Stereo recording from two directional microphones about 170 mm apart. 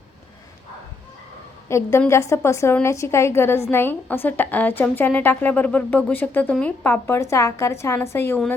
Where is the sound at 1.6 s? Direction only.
15° left (ahead or behind).